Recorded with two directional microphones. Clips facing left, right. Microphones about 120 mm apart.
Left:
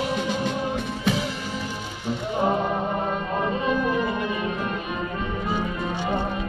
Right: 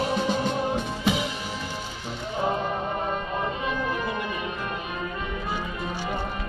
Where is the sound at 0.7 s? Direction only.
20° right (ahead or behind).